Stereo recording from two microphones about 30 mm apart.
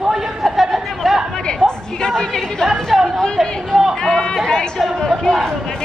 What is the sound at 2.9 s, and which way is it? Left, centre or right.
Chatter, centre.